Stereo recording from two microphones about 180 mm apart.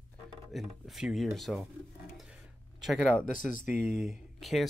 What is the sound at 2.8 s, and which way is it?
Speech, centre (ahead or behind).